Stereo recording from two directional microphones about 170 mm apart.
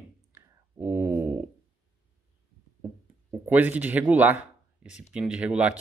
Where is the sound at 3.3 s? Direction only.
10° right (ahead or behind).